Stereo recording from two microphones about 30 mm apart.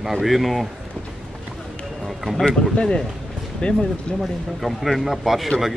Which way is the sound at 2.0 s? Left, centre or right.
Centre.